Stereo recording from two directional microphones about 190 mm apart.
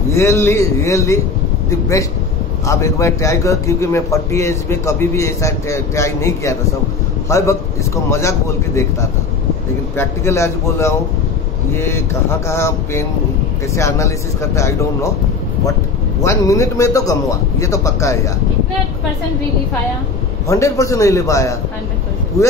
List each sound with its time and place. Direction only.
0.1 s a man's voice: 15° left (ahead or behind)
9.9 s a man's voice: 15° left (ahead or behind)
16.2 s a man's voice: 15° left (ahead or behind)
20.4 s a man's voice: 15° left (ahead or behind)